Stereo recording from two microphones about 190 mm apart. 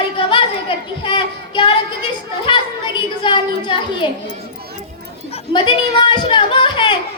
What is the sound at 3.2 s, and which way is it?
Speech, 25° left (ahead or behind).